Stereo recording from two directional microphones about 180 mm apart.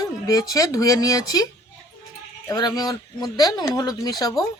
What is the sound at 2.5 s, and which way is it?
Speech, 20° left (ahead or behind).